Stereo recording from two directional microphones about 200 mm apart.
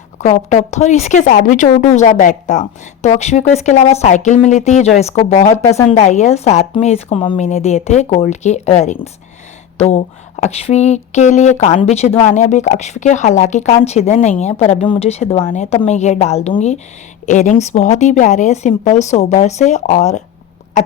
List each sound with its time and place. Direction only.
0.2 s speech: 35° left (ahead or behind)